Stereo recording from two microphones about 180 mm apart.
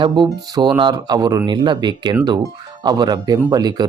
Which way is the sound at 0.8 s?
25° right (ahead or behind).